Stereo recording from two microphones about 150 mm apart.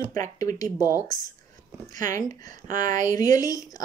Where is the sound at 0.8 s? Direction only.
15° right (ahead or behind).